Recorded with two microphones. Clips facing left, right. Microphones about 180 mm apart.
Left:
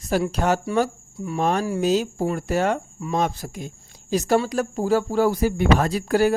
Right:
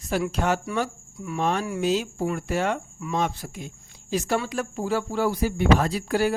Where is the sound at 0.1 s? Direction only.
40° left (ahead or behind).